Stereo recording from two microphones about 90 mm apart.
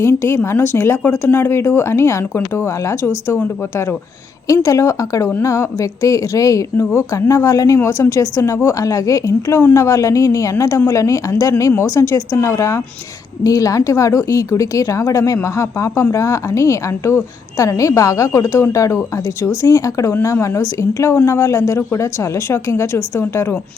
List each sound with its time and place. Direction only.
0.0 s a woman's voice: 30° left (ahead or behind)